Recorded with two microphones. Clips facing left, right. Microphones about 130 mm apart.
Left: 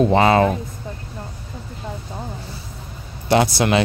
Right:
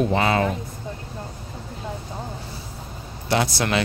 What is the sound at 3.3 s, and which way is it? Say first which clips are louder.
Speech: left 6 dB; 20° left (ahead or behind).